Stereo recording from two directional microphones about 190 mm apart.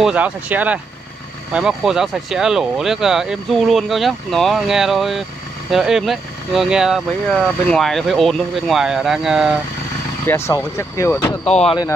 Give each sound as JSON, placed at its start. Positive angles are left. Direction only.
{"t": 0.0, "sound": "speech", "side_deg": -5}
{"t": 10.2, "sound": "speech", "side_deg": 15}
{"t": 11.4, "sound": "speech", "side_deg": 30}